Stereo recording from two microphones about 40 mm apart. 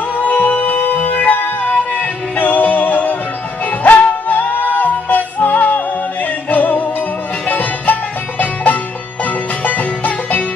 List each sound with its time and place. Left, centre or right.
0.2 s music: left